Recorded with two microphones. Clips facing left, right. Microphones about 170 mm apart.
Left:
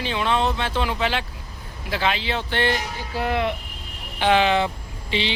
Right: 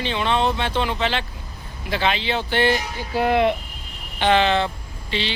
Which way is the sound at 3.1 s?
20° right (ahead or behind).